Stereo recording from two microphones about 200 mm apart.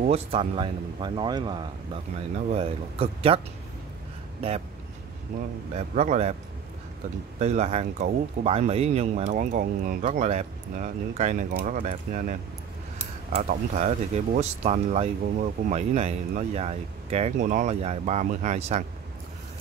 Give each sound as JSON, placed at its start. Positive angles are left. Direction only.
{"t": 0.0, "sound": "speech", "side_deg": -30}
{"t": 5.9, "sound": "speech", "side_deg": -35}
{"t": 7.3, "sound": "speech", "side_deg": -35}
{"t": 13.4, "sound": "speech", "side_deg": -40}